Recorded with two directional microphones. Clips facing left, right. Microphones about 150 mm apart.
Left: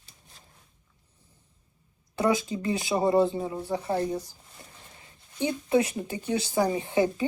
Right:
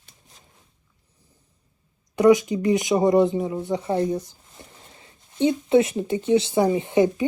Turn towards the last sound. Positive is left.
turn(degrees=-20)  # may be behind; listen again after turning